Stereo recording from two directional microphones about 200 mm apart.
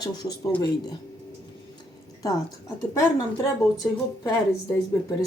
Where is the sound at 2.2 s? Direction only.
15° left (ahead or behind).